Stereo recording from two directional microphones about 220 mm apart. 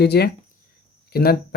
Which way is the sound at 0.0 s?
45° left (ahead or behind).